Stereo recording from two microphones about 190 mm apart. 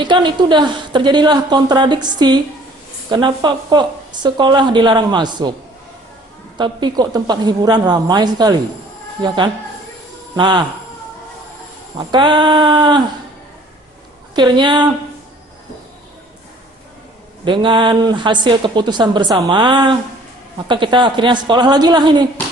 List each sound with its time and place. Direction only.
0.0 s a woman's voice: 25° right (ahead or behind)
6.6 s a woman's voice: 25° right (ahead or behind)
11.9 s a woman's voice: 25° right (ahead or behind)
14.3 s a woman's voice: 25° right (ahead or behind)
17.4 s a woman's voice: 25° right (ahead or behind)